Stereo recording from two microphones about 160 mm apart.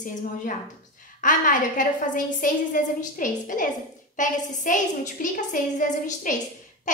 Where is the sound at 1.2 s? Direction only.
55° left (ahead or behind).